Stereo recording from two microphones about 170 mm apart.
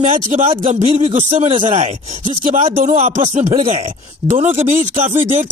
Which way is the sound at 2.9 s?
50° right (ahead or behind).